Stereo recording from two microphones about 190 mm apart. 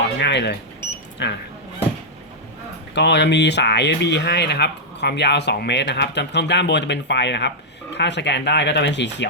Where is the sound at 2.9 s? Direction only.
65° left (ahead or behind).